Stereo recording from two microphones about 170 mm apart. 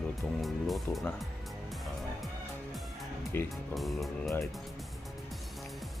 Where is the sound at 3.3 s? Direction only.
10° left (ahead or behind).